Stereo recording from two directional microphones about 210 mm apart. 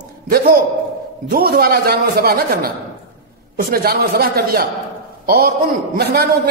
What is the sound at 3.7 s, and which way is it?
Speech, 45° right (ahead or behind).